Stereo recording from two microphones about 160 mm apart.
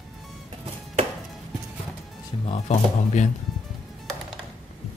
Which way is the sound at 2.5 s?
45° left (ahead or behind).